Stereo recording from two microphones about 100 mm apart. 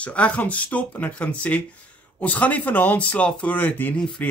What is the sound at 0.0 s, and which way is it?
Speech, 10° left (ahead or behind).